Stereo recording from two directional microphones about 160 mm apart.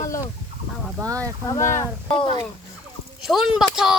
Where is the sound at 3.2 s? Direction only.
Centre (ahead or behind).